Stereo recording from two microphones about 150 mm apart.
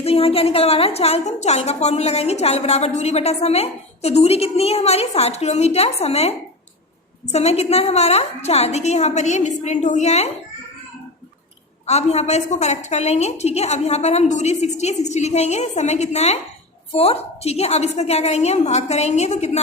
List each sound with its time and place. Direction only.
0.0 s a woman's voice: 40° left (ahead or behind)
11.9 s a woman's voice: 45° left (ahead or behind)